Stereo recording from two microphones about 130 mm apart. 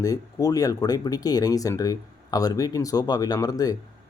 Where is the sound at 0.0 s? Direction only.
30° left (ahead or behind).